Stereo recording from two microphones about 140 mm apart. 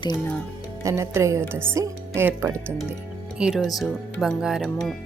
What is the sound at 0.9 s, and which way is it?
Speech, 20° right (ahead or behind).